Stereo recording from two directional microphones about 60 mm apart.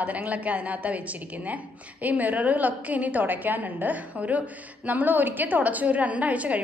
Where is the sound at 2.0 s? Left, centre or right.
Right.